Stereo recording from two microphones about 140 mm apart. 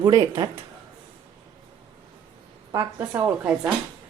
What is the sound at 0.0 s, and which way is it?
Speech, 30° right (ahead or behind).